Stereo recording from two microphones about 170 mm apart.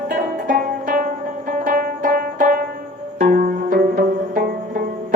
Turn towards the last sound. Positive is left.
turn(degrees=-60)  # may be behind; listen again after turning